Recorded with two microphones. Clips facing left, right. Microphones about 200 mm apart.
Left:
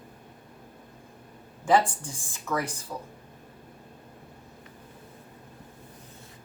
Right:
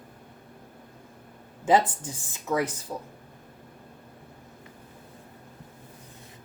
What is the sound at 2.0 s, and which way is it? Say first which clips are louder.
A woman's voice: right 3 dB; 20° right (ahead or behind).